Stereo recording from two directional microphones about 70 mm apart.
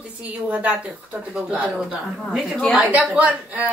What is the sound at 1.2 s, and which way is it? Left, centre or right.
A woman's voice, centre.